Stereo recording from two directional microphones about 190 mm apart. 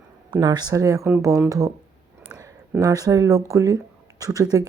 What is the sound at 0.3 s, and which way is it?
Speech, 20° right (ahead or behind).